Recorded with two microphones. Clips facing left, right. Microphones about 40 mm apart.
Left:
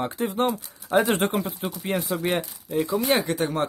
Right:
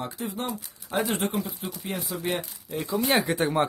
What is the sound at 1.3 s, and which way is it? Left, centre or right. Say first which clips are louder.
Speech: left 4 dB; left.